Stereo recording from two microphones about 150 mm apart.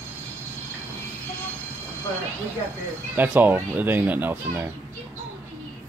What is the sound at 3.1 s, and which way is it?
Speech, 10° right (ahead or behind).